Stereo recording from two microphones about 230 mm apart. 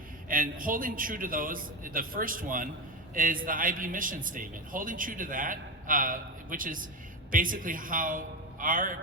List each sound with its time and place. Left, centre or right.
0.3 s a man's voice: right